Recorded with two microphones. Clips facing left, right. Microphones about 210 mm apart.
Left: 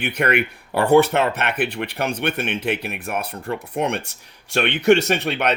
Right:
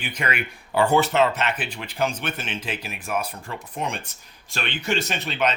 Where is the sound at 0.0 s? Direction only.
60° left (ahead or behind).